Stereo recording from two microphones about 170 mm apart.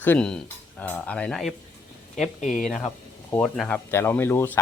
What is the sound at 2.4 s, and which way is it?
Speech, 45° left (ahead or behind).